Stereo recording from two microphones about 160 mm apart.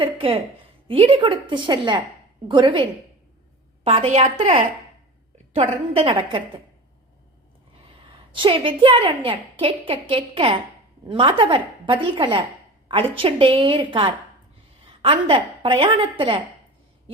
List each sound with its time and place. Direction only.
0.0 s a woman's voice: 35° right (ahead or behind)
3.8 s a woman's voice: 40° right (ahead or behind)
8.3 s a woman's voice: 30° right (ahead or behind)